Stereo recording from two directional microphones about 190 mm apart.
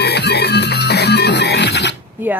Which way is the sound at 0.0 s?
60° left (ahead or behind).